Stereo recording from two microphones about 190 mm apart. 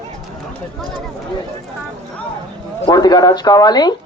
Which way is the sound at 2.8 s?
20° left (ahead or behind).